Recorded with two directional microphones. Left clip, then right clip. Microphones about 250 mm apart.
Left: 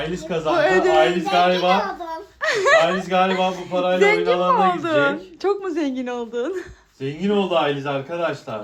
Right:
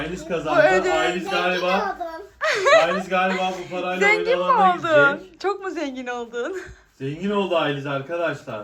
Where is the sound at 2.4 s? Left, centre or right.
Centre.